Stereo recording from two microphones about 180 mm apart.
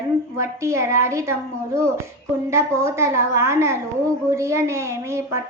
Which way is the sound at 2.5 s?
15° right (ahead or behind).